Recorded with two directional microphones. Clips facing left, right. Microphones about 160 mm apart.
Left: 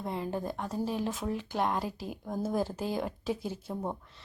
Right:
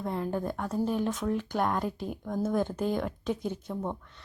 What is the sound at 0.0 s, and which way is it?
Speech, centre (ahead or behind).